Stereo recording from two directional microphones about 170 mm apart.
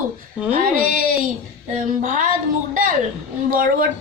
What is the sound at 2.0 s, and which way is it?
Speech, 50° right (ahead or behind).